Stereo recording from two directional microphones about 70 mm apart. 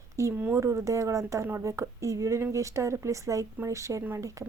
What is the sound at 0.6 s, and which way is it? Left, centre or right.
A woman's voice, right.